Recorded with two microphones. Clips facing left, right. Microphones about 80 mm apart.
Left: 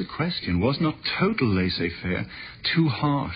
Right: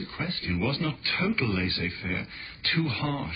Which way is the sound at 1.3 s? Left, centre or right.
Left.